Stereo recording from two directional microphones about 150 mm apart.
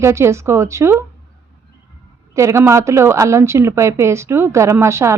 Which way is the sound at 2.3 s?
20° right (ahead or behind).